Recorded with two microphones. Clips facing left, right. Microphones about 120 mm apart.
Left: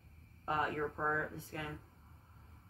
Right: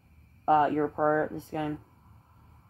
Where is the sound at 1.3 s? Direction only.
20° right (ahead or behind).